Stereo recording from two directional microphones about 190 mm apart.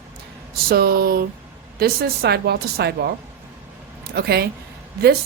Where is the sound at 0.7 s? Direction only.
55° right (ahead or behind).